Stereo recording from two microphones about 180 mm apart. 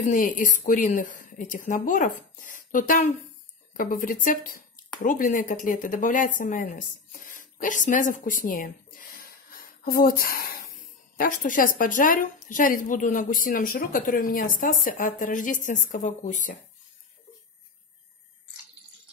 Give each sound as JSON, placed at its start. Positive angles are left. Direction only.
{"t": 0.0, "sound": "a woman's voice", "side_deg": 45}